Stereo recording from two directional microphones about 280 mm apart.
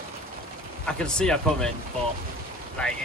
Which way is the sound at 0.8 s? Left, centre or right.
Centre.